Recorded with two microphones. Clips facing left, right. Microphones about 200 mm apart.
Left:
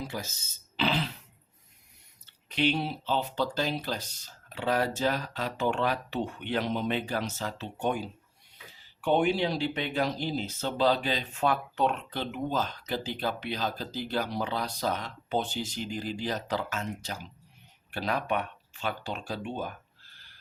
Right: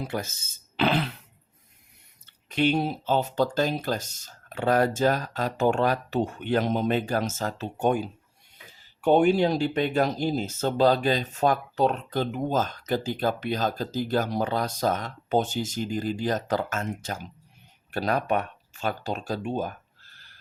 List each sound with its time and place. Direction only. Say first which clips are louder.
0.0 s speech: right 5 dB; 55° right (ahead or behind)
2.2 s speech: right 4 dB; 45° right (ahead or behind)